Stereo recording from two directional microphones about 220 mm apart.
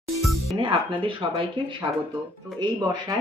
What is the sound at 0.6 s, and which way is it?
Speech, 25° right (ahead or behind).